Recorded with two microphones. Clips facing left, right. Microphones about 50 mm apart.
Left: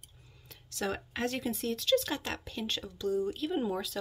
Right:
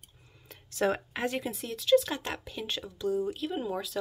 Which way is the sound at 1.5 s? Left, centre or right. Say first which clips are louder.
Right 6 dB; centre.